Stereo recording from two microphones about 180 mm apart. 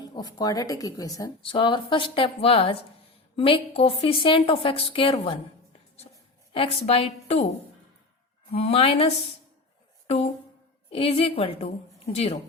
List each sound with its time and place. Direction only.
0.0 s a woman's voice: 20° left (ahead or behind)
6.5 s a woman's voice: 30° left (ahead or behind)
10.9 s a woman's voice: 30° left (ahead or behind)